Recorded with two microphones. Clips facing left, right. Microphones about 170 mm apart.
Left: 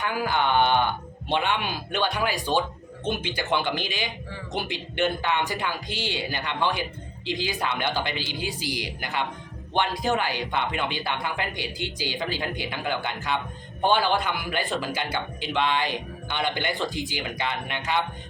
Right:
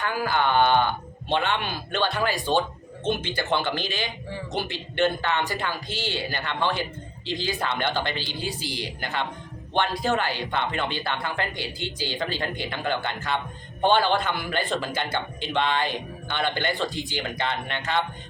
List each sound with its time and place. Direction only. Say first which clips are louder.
0.0 s speech: right 1 dB; 15° left (ahead or behind)